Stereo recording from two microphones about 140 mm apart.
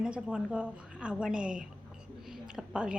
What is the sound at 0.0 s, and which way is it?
A woman's voice, 5° right (ahead or behind).